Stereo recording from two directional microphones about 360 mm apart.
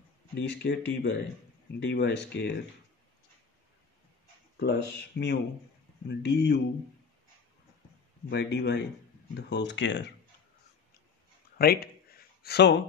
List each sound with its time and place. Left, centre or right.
0.3 s speech: left
4.6 s speech: left
8.3 s speech: left
11.5 s speech: left